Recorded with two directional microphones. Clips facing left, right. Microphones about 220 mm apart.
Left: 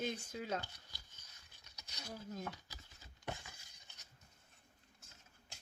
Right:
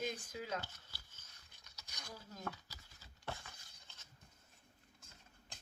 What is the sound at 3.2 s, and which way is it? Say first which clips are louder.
Glass: left 1 dB; 15° left (ahead or behind).